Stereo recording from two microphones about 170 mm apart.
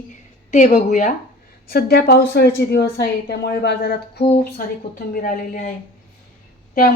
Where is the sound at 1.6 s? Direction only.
65° left (ahead or behind).